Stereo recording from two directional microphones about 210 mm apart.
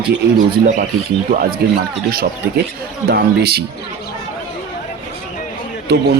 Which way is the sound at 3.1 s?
50° right (ahead or behind).